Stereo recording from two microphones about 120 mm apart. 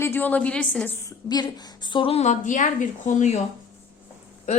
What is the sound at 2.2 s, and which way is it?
A woman's voice, 85° left.